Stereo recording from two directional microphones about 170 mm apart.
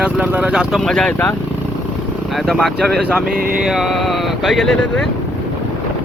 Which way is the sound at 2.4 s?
Centre (ahead or behind).